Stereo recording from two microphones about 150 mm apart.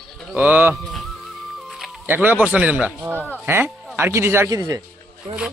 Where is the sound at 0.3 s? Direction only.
10° right (ahead or behind).